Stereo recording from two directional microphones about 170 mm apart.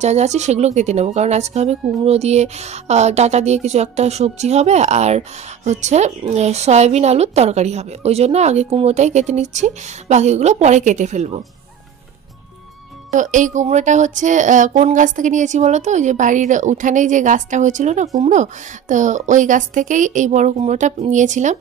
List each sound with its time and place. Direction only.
0.0 s a woman's voice: 40° right (ahead or behind)
13.1 s speech: 50° right (ahead or behind)